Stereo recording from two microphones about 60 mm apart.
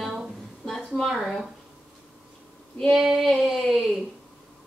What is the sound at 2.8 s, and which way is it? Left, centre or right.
Female singing, centre.